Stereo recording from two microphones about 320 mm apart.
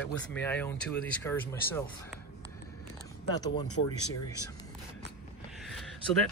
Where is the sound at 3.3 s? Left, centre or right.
Centre.